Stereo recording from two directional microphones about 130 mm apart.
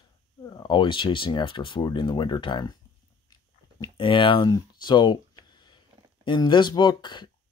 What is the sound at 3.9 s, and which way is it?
Speech, 40° left (ahead or behind).